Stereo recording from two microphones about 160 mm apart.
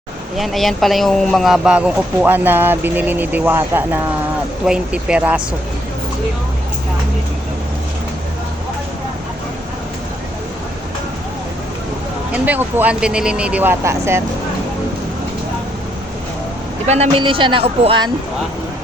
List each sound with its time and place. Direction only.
0.3 s speech: centre (ahead or behind)
12.3 s speech: 10° right (ahead or behind)
16.8 s speech: 45° right (ahead or behind)